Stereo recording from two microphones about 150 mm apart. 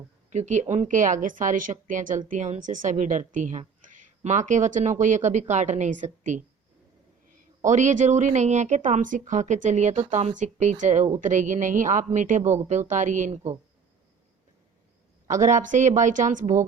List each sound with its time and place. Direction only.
0.3 s speech: 55° right (ahead or behind)
7.6 s a woman's voice: 55° right (ahead or behind)
15.3 s speech: 55° right (ahead or behind)